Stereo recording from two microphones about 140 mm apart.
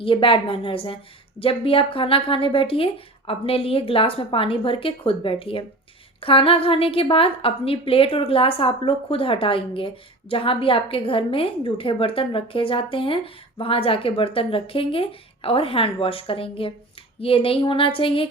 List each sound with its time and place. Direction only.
0.0 s a woman's voice: 40° left (ahead or behind)